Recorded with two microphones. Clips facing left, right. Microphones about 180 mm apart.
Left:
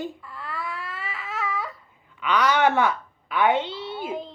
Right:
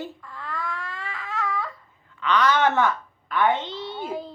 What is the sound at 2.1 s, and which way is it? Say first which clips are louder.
A woman's voice: even; 10° left (ahead or behind).